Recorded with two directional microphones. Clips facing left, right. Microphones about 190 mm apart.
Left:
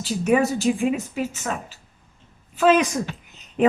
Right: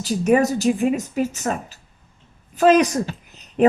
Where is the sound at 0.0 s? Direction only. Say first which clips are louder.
Right 3 dB; 40° right (ahead or behind).